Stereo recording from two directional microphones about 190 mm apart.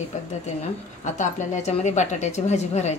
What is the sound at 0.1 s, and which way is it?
A woman's voice, 40° left (ahead or behind).